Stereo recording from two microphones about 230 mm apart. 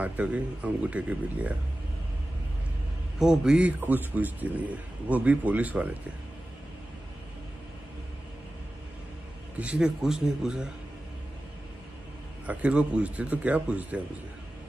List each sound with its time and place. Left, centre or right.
0.0 s speech: centre
3.2 s a man's voice: centre
9.6 s speech: centre
12.4 s speech: centre